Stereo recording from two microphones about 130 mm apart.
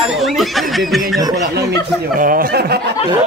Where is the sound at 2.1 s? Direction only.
90° right.